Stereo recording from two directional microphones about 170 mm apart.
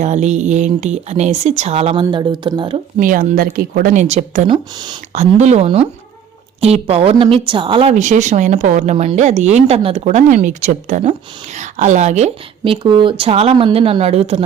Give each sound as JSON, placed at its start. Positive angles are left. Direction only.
{"t": 0.0, "sound": "a woman's voice", "side_deg": -45}
{"t": 3.0, "sound": "speech", "side_deg": -55}
{"t": 4.1, "sound": "speech", "side_deg": -45}
{"t": 4.4, "sound": "speech", "side_deg": -25}
{"t": 5.1, "sound": "a woman's voice", "side_deg": -40}